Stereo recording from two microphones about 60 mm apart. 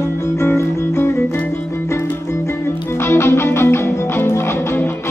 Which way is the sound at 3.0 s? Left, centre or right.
Left.